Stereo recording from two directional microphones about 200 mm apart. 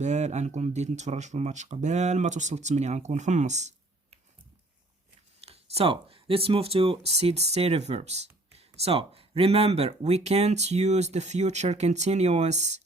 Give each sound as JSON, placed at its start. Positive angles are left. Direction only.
{"t": 0.0, "sound": "speech", "side_deg": -35}
{"t": 5.5, "sound": "speech", "side_deg": -30}